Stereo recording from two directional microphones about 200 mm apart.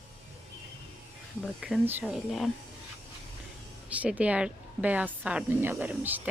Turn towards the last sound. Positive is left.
turn(degrees=-10)  # may be behind; listen again after turning